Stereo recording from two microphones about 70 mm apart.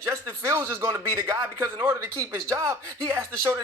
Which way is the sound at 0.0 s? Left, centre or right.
Right.